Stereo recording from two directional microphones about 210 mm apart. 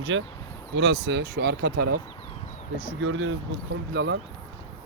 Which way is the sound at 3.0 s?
65° right (ahead or behind).